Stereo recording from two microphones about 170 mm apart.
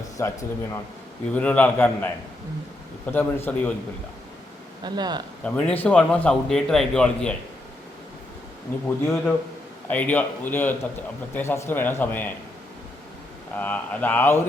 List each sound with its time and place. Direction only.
0.2 s speech: 20° left (ahead or behind)
4.8 s speech: 25° right (ahead or behind)
5.4 s a man's voice: 5° left (ahead or behind)
9.0 s speech: 15° left (ahead or behind)
13.6 s speech: 10° left (ahead or behind)